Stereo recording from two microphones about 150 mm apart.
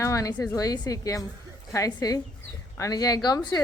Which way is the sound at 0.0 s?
20° left (ahead or behind).